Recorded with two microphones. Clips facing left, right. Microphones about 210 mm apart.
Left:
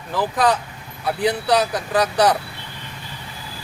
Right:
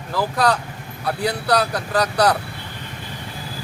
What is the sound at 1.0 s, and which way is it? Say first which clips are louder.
Speech: left 2 dB; 10° left (ahead or behind).